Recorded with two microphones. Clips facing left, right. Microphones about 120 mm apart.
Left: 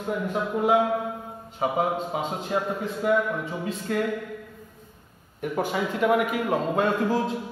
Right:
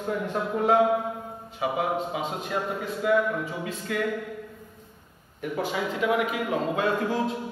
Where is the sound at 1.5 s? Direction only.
30° left (ahead or behind).